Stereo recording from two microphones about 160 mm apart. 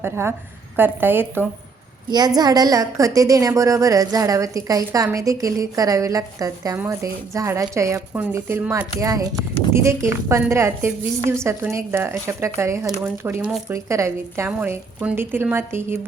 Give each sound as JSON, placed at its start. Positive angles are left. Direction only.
{"t": 0.0, "sound": "a woman's voice", "side_deg": -15}
{"t": 2.0, "sound": "a woman's voice", "side_deg": -25}